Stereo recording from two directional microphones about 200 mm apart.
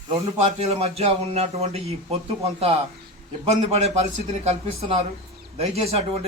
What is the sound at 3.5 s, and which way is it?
Speech, 35° right (ahead or behind).